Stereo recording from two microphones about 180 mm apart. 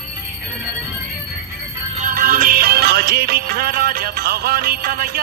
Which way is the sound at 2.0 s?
50° right (ahead or behind).